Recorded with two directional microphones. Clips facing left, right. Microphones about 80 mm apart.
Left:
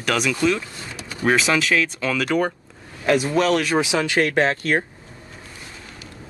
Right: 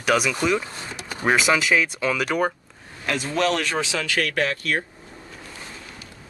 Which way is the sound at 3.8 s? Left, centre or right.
Centre.